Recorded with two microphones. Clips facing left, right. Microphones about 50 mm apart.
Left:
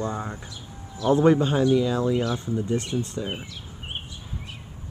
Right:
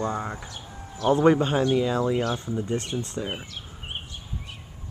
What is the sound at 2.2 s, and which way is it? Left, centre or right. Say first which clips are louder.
Speech: left 1 dB; right.